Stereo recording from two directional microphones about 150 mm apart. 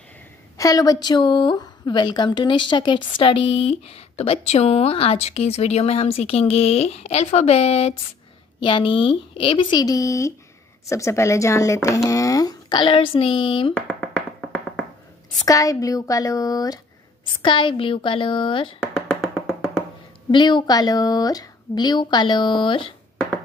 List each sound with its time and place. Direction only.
0.6 s a woman's voice: 25° left (ahead or behind)
13.7 s finger snapping: 5° left (ahead or behind)
15.4 s a woman's voice: 20° left (ahead or behind)
18.8 s music: 5° left (ahead or behind)
20.2 s speech: 30° left (ahead or behind)